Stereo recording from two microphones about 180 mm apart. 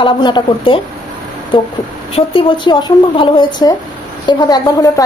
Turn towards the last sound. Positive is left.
turn(degrees=20)  # may be behind; listen again after turning